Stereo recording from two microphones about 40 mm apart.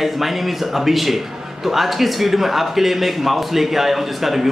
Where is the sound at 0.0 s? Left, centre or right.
Centre.